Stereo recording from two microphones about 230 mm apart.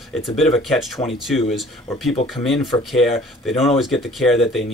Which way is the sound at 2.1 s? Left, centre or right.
Left.